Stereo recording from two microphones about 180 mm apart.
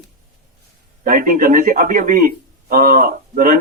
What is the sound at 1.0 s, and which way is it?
A man's voice, 50° right (ahead or behind).